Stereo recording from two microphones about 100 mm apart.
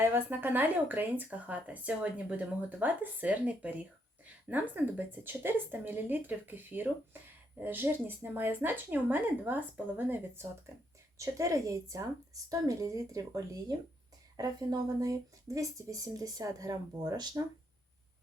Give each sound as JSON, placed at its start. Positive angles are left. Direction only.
{"t": 0.0, "sound": "speech", "side_deg": -20}
{"t": 11.2, "sound": "speech", "side_deg": -30}